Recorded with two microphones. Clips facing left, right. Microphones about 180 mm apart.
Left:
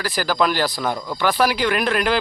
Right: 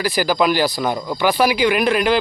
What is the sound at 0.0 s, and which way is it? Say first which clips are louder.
Speech: right 3 dB; 5° right (ahead or behind).